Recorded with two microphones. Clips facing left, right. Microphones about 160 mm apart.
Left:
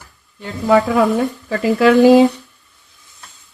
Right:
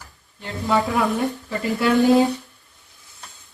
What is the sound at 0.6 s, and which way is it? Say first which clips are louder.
Speech: left 7 dB; 80° left.